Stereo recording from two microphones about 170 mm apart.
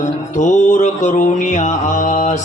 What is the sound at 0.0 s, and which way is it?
A man's voice, 45° left (ahead or behind).